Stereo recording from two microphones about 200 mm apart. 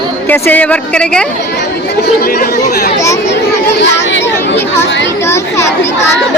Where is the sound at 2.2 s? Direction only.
50° left (ahead or behind).